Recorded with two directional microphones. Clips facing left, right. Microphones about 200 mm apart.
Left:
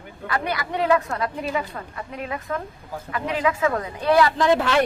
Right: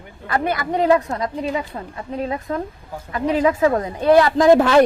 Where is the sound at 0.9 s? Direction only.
20° right (ahead or behind).